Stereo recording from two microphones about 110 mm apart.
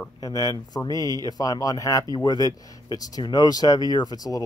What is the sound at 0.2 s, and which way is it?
Speech, 30° left (ahead or behind).